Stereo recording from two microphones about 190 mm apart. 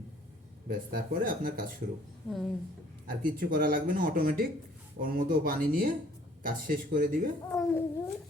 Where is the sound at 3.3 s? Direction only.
50° right (ahead or behind).